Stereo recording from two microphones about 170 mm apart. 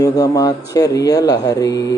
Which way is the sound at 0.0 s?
20° left (ahead or behind).